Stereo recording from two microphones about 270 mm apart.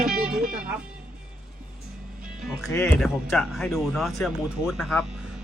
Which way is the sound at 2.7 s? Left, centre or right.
Centre.